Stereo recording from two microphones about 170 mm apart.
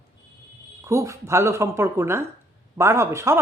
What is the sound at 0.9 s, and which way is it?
A woman's voice, 15° right (ahead or behind).